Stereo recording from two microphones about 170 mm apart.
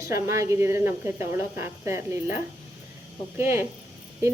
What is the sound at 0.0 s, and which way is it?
A woman's voice, 15° right (ahead or behind).